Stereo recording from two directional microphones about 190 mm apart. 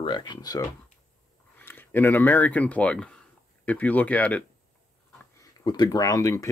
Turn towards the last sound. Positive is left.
turn(degrees=15)  # may be behind; listen again after turning